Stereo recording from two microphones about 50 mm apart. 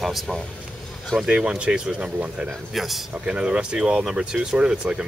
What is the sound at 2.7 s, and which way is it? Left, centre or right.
Speech, centre.